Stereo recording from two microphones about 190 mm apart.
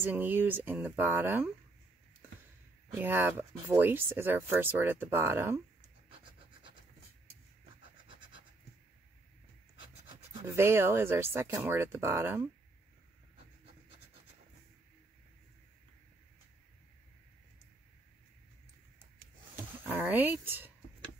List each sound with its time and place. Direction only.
0.0 s speech: 10° right (ahead or behind)
3.0 s speech: 10° right (ahead or behind)
5.8 s scratch: 30° right (ahead or behind)
10.4 s speech: 15° right (ahead or behind)
19.9 s speech: 10° right (ahead or behind)